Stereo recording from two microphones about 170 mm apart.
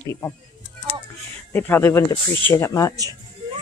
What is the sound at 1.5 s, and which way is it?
Speech, 10° left (ahead or behind).